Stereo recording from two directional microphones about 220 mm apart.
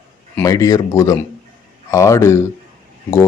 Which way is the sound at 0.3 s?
15° left (ahead or behind).